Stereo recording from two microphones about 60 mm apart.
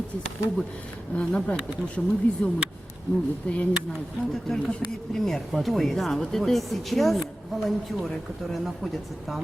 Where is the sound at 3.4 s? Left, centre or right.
Centre.